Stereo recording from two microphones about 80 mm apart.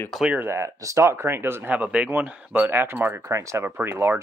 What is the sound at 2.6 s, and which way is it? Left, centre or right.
Speech, right.